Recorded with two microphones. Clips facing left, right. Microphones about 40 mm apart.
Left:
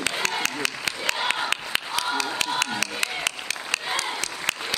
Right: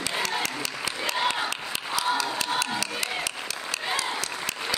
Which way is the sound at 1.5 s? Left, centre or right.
Left.